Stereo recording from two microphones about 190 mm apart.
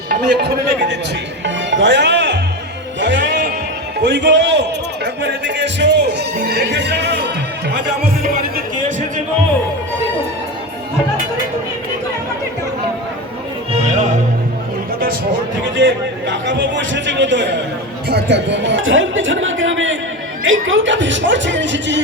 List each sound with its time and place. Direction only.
0.1 s a man's voice: 60° right (ahead or behind)
1.5 s music: 70° right (ahead or behind)
4.0 s a man's voice: 65° right (ahead or behind)
5.0 s music: 65° right (ahead or behind)
13.7 s music: 35° right (ahead or behind)
15.8 s a man's voice: 70° right (ahead or behind)